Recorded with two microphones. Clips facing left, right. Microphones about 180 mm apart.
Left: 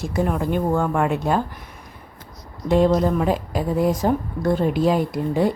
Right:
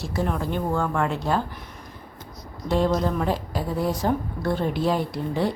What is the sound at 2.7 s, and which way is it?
Speech, 20° left (ahead or behind).